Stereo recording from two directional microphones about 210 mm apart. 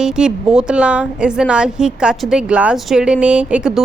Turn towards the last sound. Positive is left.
turn(degrees=-5)  # may be behind; listen again after turning